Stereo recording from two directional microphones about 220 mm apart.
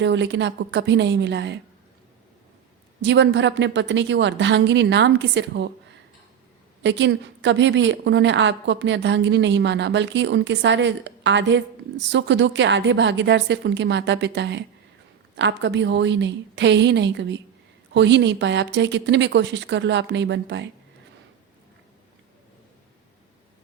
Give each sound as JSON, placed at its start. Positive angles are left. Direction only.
{"t": 0.0, "sound": "a woman's voice", "side_deg": -55}
{"t": 3.0, "sound": "a woman's voice", "side_deg": -55}
{"t": 6.8, "sound": "a woman's voice", "side_deg": -55}